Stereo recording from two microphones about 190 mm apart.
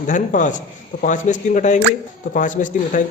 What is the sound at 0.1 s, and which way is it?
Speech, 40° left (ahead or behind).